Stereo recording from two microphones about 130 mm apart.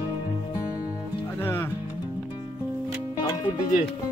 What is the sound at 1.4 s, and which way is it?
Music, 15° left (ahead or behind).